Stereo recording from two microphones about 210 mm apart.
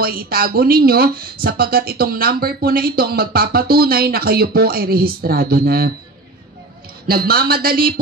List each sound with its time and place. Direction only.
0.0 s speech: 45° right (ahead or behind)
7.1 s speech: 45° right (ahead or behind)